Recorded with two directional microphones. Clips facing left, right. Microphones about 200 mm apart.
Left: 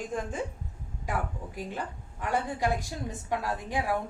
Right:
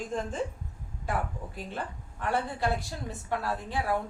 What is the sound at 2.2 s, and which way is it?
A woman's voice, 15° left (ahead or behind).